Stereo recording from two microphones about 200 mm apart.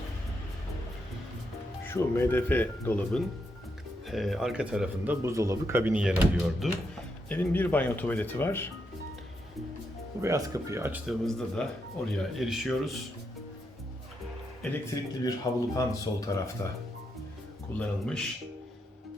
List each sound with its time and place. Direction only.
1.9 s speech: 10° left (ahead or behind); by 6.7 s 5° right (ahead or behind)
7.3 s speech: 10° left (ahead or behind)
10.2 s speech: 15° right (ahead or behind)
15.2 s speech: 20° left (ahead or behind)
17.7 s speech: 5° left (ahead or behind)